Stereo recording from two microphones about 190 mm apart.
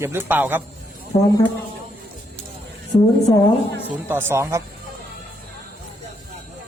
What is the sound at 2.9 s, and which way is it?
Speech, 35° left (ahead or behind).